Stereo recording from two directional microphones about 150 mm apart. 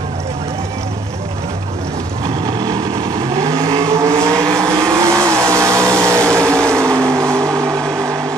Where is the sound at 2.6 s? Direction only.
25° right (ahead or behind).